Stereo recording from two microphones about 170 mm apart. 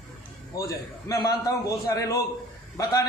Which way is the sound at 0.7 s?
20° left (ahead or behind).